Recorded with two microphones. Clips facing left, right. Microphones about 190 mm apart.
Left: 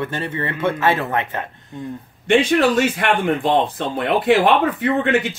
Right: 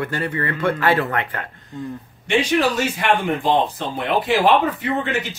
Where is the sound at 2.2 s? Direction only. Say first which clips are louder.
Left 3 dB; 55° left (ahead or behind).